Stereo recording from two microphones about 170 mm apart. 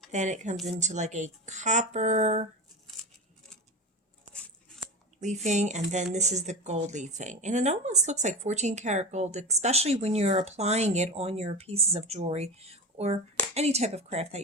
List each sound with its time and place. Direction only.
0.1 s speech: 45° right (ahead or behind)
5.2 s speech: 45° right (ahead or behind)